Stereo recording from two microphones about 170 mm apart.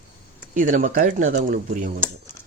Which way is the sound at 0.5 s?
50° right (ahead or behind).